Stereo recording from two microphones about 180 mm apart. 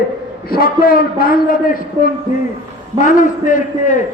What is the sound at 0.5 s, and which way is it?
A man's voice, 55° left (ahead or behind).